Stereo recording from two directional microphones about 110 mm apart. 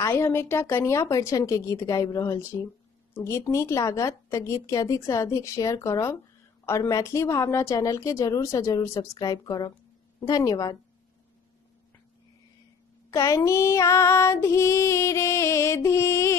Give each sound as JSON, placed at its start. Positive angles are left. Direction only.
{"t": 0.0, "sound": "child singing", "side_deg": 25}
{"t": 10.2, "sound": "a woman's voice", "side_deg": 35}
{"t": 13.1, "sound": "child singing", "side_deg": 30}